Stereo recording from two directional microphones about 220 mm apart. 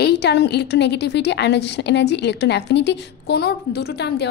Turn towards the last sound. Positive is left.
turn(degrees=50)  # may be behind; listen again after turning